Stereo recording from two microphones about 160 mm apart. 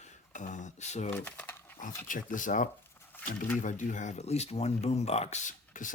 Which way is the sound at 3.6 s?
50° left (ahead or behind).